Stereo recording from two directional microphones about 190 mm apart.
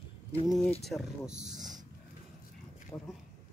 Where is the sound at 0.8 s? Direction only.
Centre (ahead or behind).